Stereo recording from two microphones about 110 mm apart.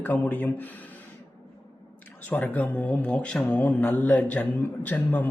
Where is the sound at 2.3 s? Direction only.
15° left (ahead or behind).